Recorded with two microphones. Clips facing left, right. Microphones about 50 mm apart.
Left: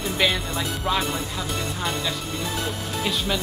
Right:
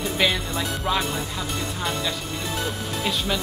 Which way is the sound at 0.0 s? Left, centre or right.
Centre.